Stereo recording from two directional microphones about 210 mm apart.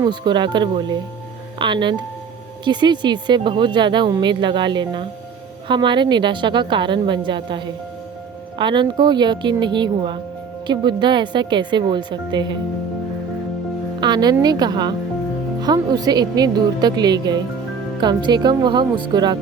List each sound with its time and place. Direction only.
0.0 s speech: 20° right (ahead or behind)
14.0 s speech: 20° right (ahead or behind)